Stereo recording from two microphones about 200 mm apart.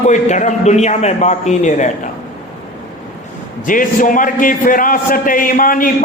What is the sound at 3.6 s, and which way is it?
A man's voice, 40° left (ahead or behind).